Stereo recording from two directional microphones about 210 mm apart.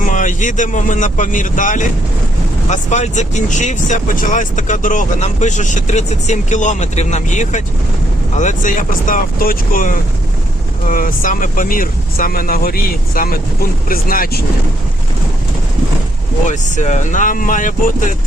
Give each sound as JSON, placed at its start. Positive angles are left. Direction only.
{"t": 0.1, "sound": "speech", "side_deg": 35}
{"t": 16.5, "sound": "speech", "side_deg": 35}